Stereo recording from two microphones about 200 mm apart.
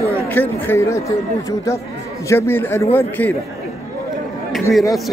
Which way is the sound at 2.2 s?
10° left (ahead or behind).